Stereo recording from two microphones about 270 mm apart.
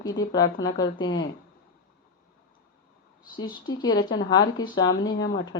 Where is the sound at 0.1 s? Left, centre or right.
Left.